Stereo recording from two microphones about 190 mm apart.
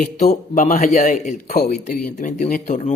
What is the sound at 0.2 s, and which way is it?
Speech, 40° left (ahead or behind).